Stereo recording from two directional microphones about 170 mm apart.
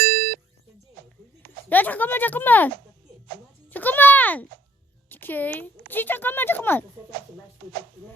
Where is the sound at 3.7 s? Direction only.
10° left (ahead or behind).